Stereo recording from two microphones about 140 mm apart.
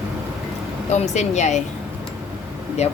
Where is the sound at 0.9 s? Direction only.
55° left (ahead or behind).